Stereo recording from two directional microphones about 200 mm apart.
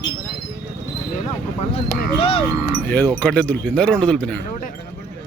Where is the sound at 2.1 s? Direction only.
30° left (ahead or behind).